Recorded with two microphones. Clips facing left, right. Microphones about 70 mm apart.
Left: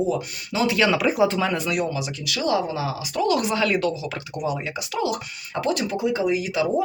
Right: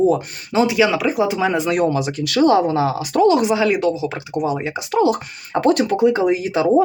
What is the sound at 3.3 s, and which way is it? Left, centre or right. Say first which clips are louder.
Speech: right 5 dB; centre.